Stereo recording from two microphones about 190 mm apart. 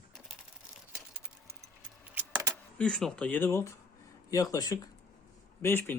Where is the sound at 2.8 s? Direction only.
5° left (ahead or behind).